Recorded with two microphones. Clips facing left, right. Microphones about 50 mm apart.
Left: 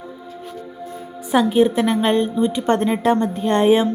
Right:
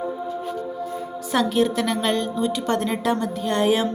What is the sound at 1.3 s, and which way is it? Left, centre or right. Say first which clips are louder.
A woman's voice: left 5 dB; centre.